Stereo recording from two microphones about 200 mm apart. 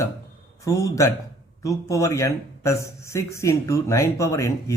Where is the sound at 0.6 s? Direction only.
15° left (ahead or behind).